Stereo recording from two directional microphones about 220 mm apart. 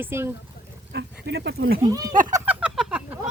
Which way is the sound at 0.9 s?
55° right (ahead or behind).